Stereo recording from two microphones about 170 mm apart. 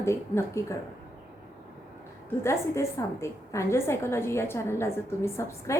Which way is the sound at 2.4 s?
15° left (ahead or behind).